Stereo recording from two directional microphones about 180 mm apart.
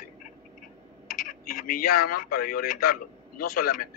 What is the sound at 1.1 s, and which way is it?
A man's voice, 50° left (ahead or behind).